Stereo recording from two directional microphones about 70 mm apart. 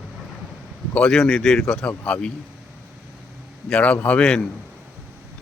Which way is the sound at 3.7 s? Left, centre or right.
Centre.